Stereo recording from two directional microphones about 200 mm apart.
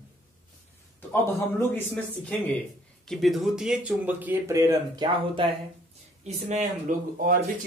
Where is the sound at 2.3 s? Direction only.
5° left (ahead or behind); by 5.4 s 20° right (ahead or behind).